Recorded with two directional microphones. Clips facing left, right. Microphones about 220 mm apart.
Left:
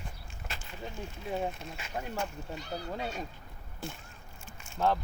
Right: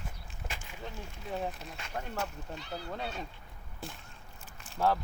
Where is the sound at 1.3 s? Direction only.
Centre (ahead or behind).